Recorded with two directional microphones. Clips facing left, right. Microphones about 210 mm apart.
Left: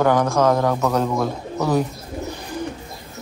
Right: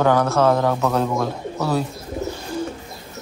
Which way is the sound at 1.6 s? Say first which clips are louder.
Left 2 dB; 15° left (ahead or behind).